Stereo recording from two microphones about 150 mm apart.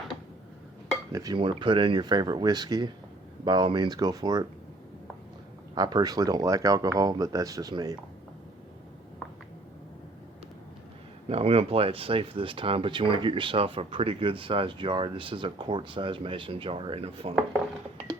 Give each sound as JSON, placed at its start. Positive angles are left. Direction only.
{"t": 1.1, "sound": "speech", "side_deg": -25}
{"t": 5.7, "sound": "speech", "side_deg": -30}
{"t": 11.3, "sound": "speech", "side_deg": -40}